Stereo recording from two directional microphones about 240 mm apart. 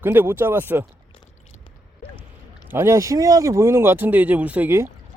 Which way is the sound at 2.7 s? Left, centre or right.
Centre.